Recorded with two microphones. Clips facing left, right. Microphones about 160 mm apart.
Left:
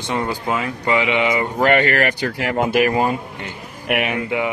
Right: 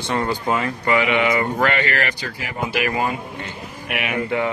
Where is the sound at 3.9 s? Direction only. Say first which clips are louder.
Left 7 dB; 55° left (ahead or behind).